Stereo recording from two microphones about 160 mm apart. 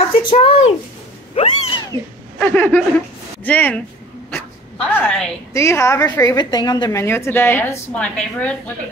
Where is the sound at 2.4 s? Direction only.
10° left (ahead or behind).